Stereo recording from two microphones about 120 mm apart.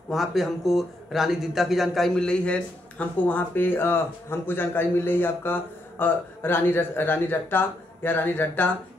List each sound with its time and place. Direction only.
0.1 s a man's voice: centre (ahead or behind); by 8.7 s 15° left (ahead or behind)